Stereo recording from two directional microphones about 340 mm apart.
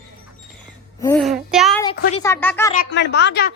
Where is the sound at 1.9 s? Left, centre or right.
Left.